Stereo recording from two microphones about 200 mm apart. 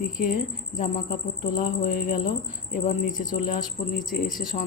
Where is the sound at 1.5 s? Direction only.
45° left (ahead or behind).